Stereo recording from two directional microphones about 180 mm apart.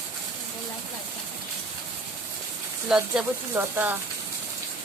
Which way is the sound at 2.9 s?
10° right (ahead or behind).